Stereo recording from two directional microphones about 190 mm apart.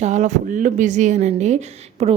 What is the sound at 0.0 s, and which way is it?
A woman's voice, 40° right (ahead or behind).